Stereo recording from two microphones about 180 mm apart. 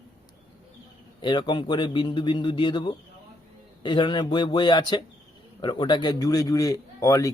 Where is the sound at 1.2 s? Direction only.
25° left (ahead or behind).